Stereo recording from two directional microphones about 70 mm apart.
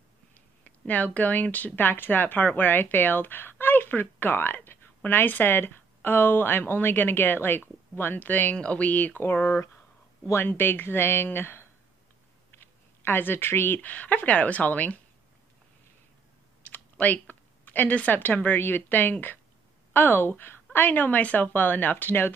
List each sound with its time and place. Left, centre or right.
0.7 s speech: left
12.4 s a sound: left
13.7 s speech: left
17.0 s speech: left